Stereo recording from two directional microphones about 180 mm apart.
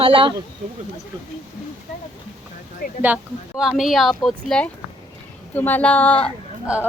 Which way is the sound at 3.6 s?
Centre (ahead or behind).